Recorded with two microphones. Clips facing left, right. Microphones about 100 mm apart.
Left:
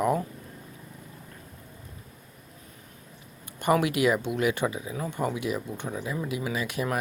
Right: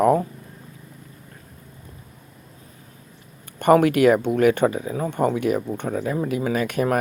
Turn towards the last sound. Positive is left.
turn(degrees=-50)  # may be behind; listen again after turning